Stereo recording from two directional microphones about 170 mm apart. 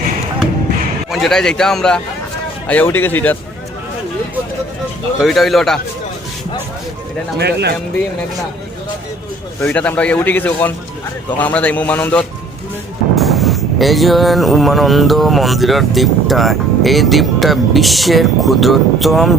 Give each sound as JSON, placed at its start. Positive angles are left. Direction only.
{"t": 1.1, "sound": "wind noise", "side_deg": 0}
{"t": 2.6, "sound": "a man's voice", "side_deg": 10}
{"t": 5.2, "sound": "wind noise", "side_deg": 0}
{"t": 7.3, "sound": "speech", "side_deg": -75}
{"t": 9.6, "sound": "a man's voice", "side_deg": 10}
{"t": 13.1, "sound": "wind noise", "side_deg": 0}